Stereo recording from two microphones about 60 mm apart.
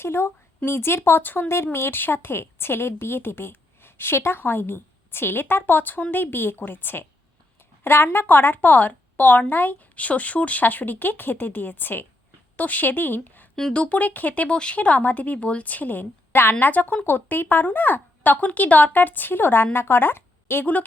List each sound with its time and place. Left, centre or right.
0.0 s speech: left
1.5 s a woman's voice: left